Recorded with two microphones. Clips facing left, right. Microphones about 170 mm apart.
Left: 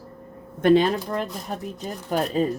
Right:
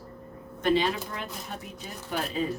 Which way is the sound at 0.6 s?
50° left (ahead or behind).